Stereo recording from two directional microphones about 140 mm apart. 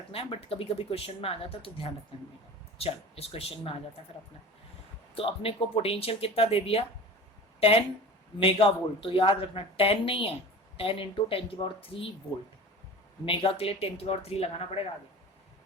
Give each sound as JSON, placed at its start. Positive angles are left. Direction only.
{"t": 0.1, "sound": "speech", "side_deg": 45}
{"t": 5.1, "sound": "speech", "side_deg": 40}
{"t": 13.2, "sound": "speech", "side_deg": 45}